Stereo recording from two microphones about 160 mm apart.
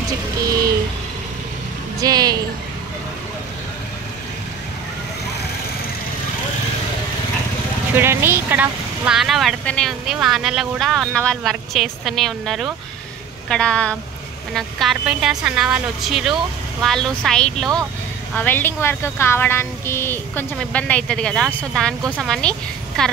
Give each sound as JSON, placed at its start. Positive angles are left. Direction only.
{"t": 2.0, "sound": "a woman's voice", "side_deg": -25}
{"t": 7.9, "sound": "a woman's voice", "side_deg": -15}